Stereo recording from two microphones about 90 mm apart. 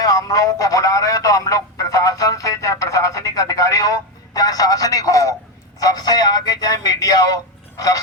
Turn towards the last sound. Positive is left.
turn(degrees=40)  # may be behind; listen again after turning